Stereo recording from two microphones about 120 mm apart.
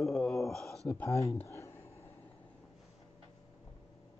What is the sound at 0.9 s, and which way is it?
Speech, 25° left (ahead or behind).